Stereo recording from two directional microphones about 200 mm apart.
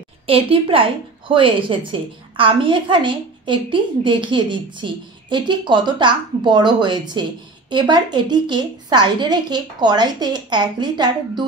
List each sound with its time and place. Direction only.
0.3 s a woman's voice: 25° right (ahead or behind)